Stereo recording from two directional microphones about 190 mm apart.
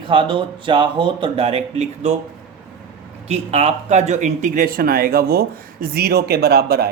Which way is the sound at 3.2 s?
35° right (ahead or behind).